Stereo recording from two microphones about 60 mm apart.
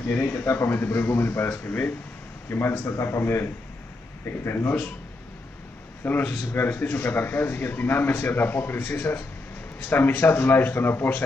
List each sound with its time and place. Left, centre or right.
0.2 s speech: left
6.0 s speech: left